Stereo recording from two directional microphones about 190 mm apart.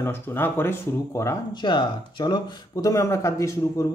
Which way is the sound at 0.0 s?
10° left (ahead or behind).